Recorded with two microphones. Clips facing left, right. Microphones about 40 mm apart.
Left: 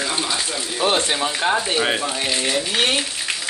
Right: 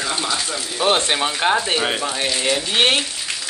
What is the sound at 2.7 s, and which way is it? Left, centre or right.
Speech, right.